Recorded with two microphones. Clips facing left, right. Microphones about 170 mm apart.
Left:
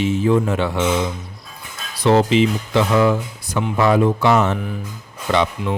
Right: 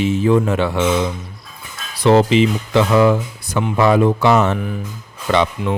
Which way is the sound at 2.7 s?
85° right.